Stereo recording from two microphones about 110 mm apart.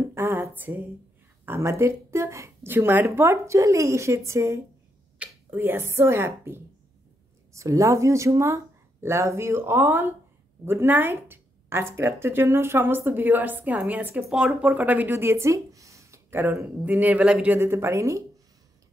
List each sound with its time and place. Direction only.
0.0 s a sound: 25° right (ahead or behind)
1.4 s speech: 20° right (ahead or behind)
17.6 s speech: 25° right (ahead or behind)